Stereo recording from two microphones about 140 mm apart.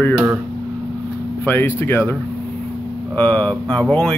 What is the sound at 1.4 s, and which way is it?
Speech, 15° left (ahead or behind).